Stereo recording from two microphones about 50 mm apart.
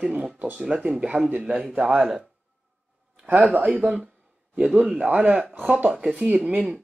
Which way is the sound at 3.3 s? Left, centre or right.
Right.